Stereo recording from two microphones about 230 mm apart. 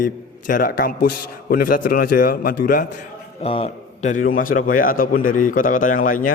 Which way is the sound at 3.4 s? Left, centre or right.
Left.